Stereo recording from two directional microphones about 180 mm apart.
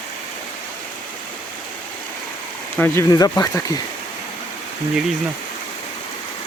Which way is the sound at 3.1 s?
20° left (ahead or behind).